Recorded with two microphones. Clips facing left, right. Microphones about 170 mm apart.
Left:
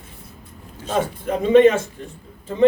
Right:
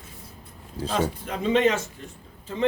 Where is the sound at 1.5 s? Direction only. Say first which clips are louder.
Left 9 dB; 55° left (ahead or behind).